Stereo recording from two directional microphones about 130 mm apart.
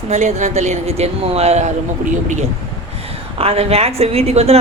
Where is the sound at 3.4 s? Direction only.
50° right (ahead or behind).